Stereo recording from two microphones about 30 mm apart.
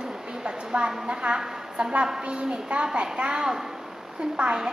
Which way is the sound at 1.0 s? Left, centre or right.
Right.